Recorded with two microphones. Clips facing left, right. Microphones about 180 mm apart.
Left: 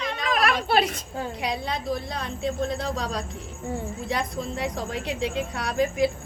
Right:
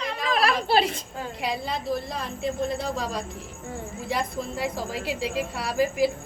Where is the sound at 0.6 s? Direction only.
30° right (ahead or behind).